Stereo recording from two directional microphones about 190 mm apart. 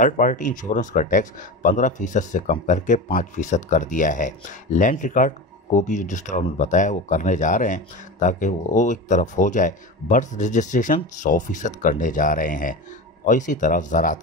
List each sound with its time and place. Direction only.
0.0 s speech: 45° left (ahead or behind)